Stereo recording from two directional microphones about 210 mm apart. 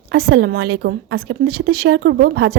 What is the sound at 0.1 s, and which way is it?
A woman's voice, 50° right (ahead or behind).